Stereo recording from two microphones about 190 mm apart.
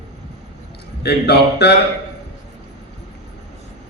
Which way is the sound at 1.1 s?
60° left (ahead or behind).